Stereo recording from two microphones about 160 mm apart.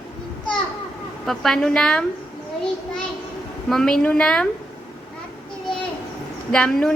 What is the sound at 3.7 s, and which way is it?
Speech, 5° left (ahead or behind).